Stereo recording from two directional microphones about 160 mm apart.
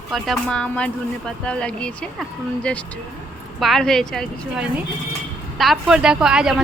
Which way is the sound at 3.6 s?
Centre (ahead or behind).